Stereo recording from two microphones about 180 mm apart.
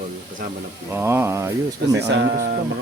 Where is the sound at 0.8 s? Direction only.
10° right (ahead or behind).